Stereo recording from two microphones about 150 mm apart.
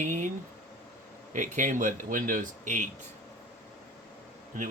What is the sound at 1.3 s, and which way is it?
Speech, 55° right (ahead or behind).